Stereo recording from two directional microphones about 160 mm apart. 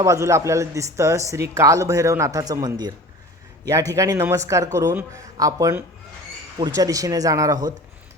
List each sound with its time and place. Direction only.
0.0 s speech: 20° right (ahead or behind)
3.9 s speech: 20° right (ahead or behind)